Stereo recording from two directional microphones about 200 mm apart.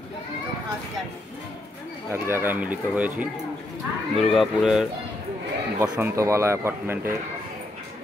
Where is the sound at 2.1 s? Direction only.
10° right (ahead or behind).